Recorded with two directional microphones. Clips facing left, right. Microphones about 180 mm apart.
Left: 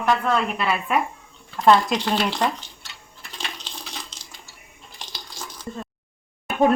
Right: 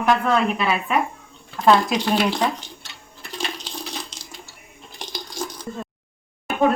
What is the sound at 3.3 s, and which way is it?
Coin, 10° right (ahead or behind).